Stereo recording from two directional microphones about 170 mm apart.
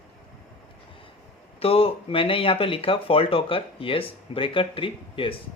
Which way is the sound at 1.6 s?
35° left (ahead or behind).